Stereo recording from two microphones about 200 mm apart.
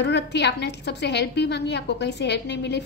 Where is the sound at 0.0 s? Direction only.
60° left (ahead or behind).